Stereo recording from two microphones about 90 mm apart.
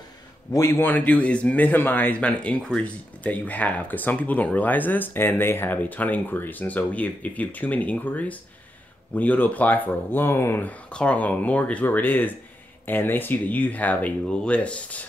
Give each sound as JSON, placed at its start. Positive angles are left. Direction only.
{"t": 0.5, "sound": "a man's voice", "side_deg": 35}
{"t": 0.7, "sound": "speech", "side_deg": 20}